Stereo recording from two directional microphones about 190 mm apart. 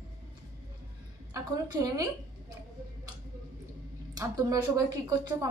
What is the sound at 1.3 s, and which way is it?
A woman's voice, 20° right (ahead or behind).